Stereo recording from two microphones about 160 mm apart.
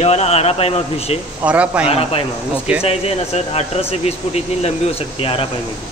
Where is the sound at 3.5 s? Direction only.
40° left (ahead or behind).